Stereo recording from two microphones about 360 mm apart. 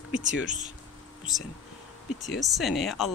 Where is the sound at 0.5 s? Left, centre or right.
Right.